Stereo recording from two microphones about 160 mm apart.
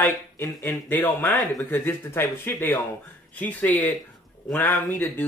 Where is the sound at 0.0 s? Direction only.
15° left (ahead or behind).